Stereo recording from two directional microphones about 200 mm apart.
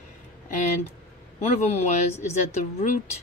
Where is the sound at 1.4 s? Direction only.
35° left (ahead or behind).